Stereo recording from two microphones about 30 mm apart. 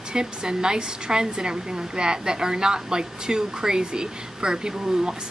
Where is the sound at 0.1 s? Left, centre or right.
Right.